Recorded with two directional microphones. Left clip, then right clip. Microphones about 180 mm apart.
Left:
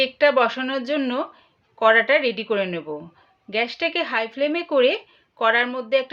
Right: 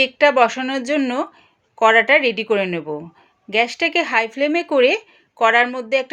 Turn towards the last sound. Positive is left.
turn(degrees=-35)  # may be behind; listen again after turning